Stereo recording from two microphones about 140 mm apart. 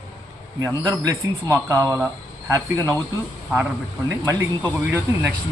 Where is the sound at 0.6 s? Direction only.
25° right (ahead or behind).